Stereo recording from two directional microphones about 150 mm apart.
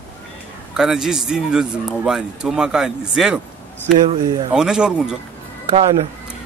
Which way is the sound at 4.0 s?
30° right (ahead or behind).